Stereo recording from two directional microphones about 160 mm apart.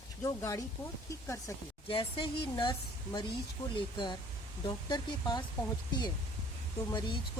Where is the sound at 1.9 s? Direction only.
35° left (ahead or behind).